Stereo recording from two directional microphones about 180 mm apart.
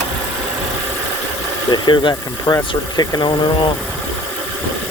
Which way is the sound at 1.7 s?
25° left (ahead or behind).